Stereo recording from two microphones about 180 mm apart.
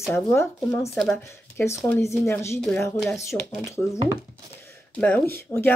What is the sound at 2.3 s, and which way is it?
A woman's voice, 15° left (ahead or behind).